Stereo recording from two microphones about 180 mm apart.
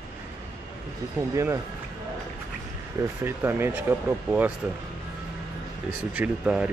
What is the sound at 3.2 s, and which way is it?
Speech, 15° right (ahead or behind).